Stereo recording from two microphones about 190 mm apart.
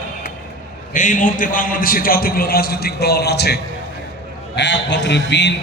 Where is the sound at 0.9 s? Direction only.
40° left (ahead or behind); by 5.5 s 65° left (ahead or behind).